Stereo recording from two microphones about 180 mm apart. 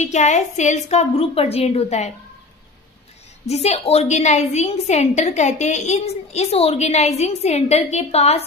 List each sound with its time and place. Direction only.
0.0 s a woman's voice: 40° left (ahead or behind)
3.4 s a woman's voice: 35° left (ahead or behind)